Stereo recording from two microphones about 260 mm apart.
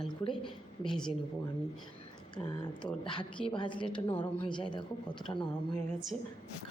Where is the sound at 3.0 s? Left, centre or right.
Centre.